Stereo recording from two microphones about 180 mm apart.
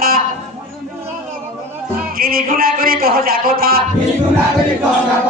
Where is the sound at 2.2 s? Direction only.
55° right (ahead or behind).